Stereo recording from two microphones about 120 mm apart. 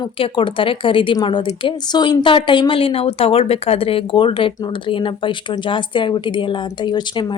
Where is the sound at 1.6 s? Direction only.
35° left (ahead or behind).